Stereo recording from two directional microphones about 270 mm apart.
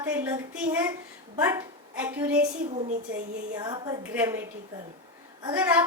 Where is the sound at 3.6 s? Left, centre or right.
Centre.